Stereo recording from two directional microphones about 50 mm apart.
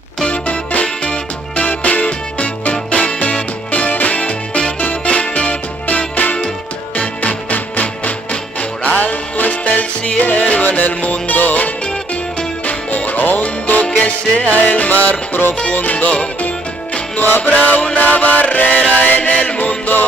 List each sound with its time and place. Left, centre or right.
0.2 s music: left
12.9 s music: left
17.4 s mantra: left
17.9 s chant: left
19.0 s music: left
19.3 s music: left